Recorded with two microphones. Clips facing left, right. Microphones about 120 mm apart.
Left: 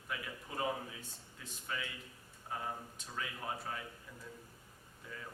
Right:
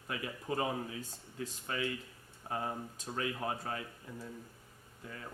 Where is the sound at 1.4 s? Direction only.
45° right (ahead or behind).